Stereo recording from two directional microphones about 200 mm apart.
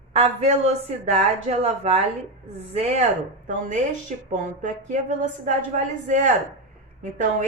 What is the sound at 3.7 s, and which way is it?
Speech, 40° right (ahead or behind).